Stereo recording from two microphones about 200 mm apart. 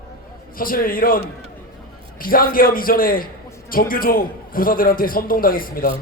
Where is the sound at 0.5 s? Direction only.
45° left (ahead or behind).